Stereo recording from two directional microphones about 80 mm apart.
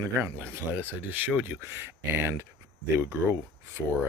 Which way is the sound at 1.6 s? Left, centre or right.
Right.